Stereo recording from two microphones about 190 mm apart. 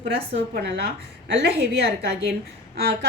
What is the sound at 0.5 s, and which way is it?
A woman's voice, 60° right (ahead or behind).